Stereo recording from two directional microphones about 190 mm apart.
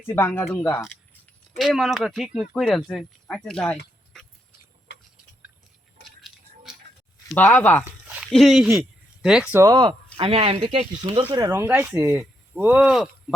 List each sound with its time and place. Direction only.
0.1 s speech: 10° left (ahead or behind)
6.0 s a sound: centre (ahead or behind)
7.3 s speech: 10° left (ahead or behind)
8.0 s a sound: 5° right (ahead or behind)
8.8 s speech: 5° right (ahead or behind)
10.2 s speech: 30° right (ahead or behind)
11.4 s speech: 10° right (ahead or behind)